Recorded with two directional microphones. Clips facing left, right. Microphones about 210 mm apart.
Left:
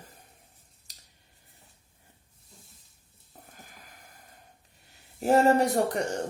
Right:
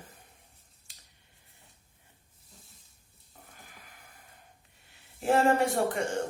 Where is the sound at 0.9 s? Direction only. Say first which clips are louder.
Left 1 dB; 40° left (ahead or behind).